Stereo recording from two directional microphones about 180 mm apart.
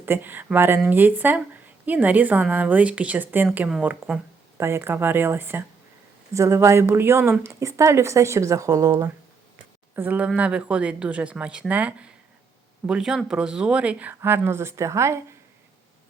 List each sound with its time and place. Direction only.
0.0 s speech: 10° right (ahead or behind)